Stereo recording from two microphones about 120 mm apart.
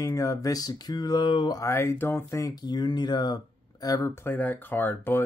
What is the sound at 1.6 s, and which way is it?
Speech, 25° left (ahead or behind).